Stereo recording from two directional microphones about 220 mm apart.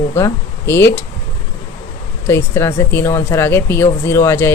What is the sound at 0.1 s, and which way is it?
Speech, 10° left (ahead or behind).